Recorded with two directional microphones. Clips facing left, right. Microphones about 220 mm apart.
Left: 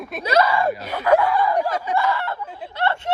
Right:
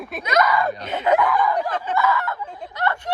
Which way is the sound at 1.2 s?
30° left (ahead or behind).